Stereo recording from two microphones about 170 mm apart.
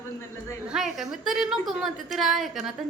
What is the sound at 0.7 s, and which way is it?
A woman's voice, centre (ahead or behind).